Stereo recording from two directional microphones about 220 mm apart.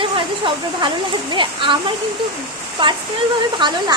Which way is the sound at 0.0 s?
20° right (ahead or behind).